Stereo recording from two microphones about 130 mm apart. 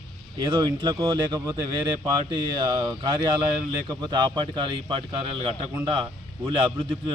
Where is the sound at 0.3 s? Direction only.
40° right (ahead or behind).